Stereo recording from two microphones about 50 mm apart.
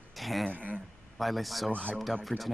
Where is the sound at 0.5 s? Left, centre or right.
Right.